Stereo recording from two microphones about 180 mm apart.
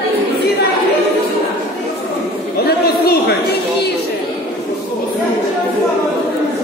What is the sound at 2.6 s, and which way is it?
Chatter, 60° left (ahead or behind).